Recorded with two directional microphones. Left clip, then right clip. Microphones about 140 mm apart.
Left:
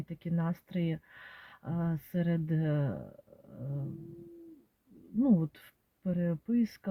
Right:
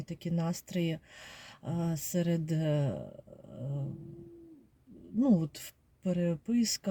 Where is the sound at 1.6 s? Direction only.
15° right (ahead or behind).